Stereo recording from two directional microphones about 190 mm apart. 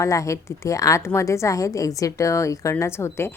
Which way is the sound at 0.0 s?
15° left (ahead or behind).